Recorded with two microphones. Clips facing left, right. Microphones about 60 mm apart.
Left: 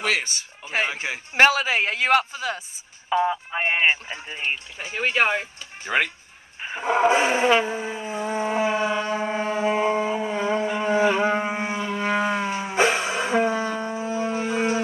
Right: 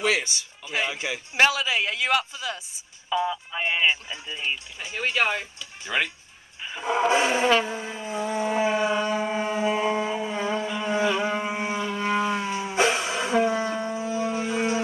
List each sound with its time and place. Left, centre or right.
0.0 s speech: left
6.6 s roar: left